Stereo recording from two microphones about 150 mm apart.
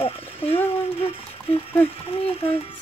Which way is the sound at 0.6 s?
40° left (ahead or behind).